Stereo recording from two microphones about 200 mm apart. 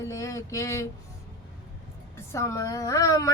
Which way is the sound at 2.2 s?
15° left (ahead or behind).